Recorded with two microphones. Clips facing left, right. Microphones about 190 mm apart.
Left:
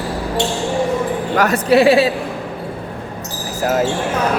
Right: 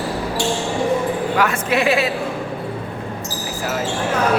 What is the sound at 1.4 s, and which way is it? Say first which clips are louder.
Speech: left 9 dB; 35° left (ahead or behind).